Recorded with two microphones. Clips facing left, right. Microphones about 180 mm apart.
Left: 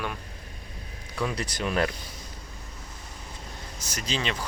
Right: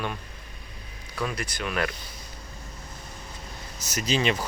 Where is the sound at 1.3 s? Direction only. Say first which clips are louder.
Left 2 dB; 30° left (ahead or behind).